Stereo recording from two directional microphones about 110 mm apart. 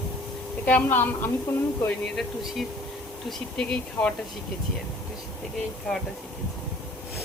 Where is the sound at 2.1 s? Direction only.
Centre (ahead or behind).